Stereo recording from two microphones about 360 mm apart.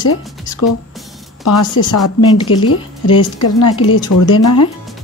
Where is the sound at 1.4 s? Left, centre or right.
Left.